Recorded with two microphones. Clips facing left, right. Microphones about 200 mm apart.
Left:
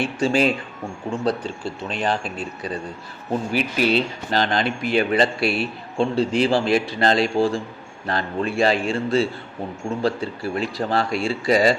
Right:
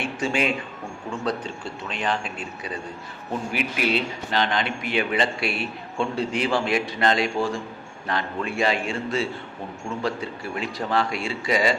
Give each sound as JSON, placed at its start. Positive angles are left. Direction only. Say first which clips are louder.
{"t": 0.0, "sound": "speech", "louder": "left 5 dB", "side_deg": 35}